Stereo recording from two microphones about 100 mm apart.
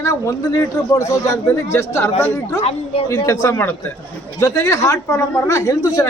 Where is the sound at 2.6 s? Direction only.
85° left.